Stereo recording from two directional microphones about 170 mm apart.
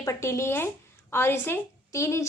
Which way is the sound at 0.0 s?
20° left (ahead or behind).